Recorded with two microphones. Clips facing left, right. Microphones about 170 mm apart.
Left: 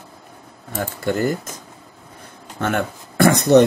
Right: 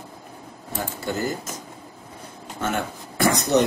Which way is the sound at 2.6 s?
60° left (ahead or behind).